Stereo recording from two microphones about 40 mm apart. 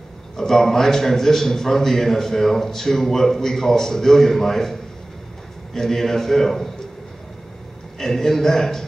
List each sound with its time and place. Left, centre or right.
0.4 s a man's voice: centre
8.0 s a man's voice: centre